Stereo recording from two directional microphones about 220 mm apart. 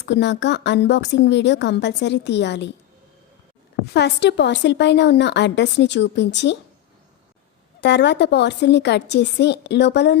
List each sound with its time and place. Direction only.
0.0 s a woman's voice: 50° left (ahead or behind)
3.9 s a woman's voice: 50° left (ahead or behind)
7.8 s a woman's voice: 50° left (ahead or behind)